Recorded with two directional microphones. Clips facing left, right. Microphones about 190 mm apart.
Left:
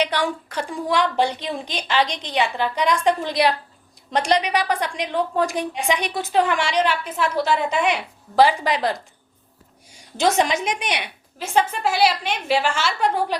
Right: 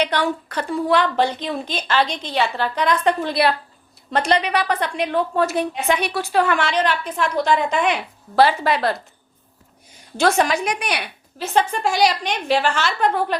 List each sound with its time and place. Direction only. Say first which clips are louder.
0.0 s a woman's voice: right 2 dB; 10° left (ahead or behind)
11.3 s a woman's voice: right 1 dB; 10° left (ahead or behind)